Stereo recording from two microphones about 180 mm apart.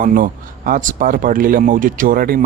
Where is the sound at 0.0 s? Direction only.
50° right (ahead or behind).